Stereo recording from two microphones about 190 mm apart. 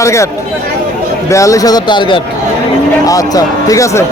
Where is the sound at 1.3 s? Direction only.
15° left (ahead or behind).